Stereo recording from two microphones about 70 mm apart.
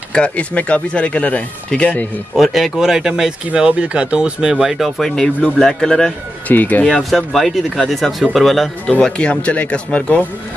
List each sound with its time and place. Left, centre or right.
0.1 s speech: centre
2.3 s speech: centre
6.5 s speech: left
6.9 s speech: centre
9.0 s speech: centre